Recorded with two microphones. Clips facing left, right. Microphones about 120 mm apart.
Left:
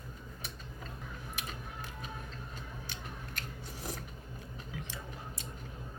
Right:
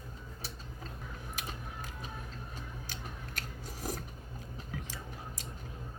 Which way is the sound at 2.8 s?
40° right (ahead or behind).